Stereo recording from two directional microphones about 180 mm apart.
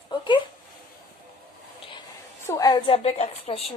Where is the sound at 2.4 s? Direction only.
20° left (ahead or behind).